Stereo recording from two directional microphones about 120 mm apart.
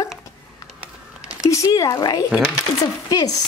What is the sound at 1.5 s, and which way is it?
Speech, 30° left (ahead or behind).